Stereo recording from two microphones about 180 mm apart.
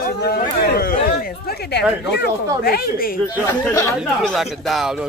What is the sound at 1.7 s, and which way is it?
Speech, 65° left (ahead or behind).